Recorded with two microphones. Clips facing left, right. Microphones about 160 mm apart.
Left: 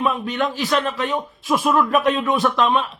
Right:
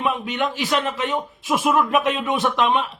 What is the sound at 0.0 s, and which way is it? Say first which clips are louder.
Speech: left 2 dB; 20° right (ahead or behind).